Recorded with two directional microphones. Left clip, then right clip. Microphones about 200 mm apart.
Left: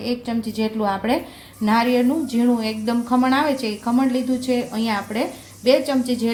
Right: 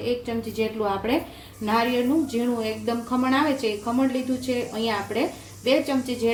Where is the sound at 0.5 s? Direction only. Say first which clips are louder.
Left 2 dB; 40° left (ahead or behind).